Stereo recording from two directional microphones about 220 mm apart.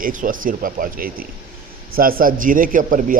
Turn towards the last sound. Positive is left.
turn(degrees=-35)  # may be behind; listen again after turning